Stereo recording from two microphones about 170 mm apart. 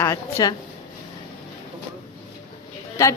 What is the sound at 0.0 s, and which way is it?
Speech, 20° left (ahead or behind).